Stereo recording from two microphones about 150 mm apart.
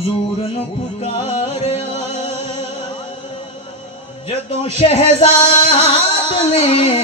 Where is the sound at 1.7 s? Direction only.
40° left (ahead or behind).